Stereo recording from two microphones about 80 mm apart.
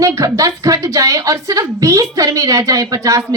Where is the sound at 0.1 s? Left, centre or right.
Right.